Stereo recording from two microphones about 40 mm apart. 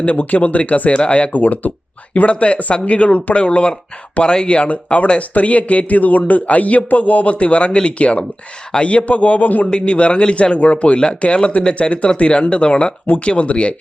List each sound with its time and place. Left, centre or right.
0.0 s speech: left
1.3 s speech: left
2.1 s speech: left
9.6 s a man's voice: left